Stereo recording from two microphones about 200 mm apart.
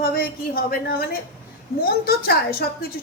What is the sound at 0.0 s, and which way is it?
A woman's voice, 50° left (ahead or behind).